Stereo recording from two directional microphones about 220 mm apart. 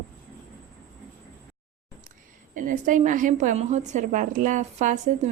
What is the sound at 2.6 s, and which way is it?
A woman's voice, 35° right (ahead or behind).